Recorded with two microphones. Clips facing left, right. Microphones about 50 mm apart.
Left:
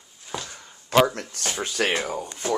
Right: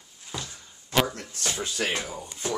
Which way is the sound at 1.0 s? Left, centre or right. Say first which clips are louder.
Left 5 dB; left.